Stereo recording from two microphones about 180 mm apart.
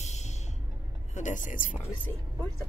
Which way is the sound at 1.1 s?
45° left (ahead or behind).